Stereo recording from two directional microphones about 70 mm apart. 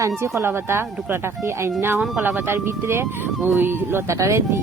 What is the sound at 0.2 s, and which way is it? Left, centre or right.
Speech, right.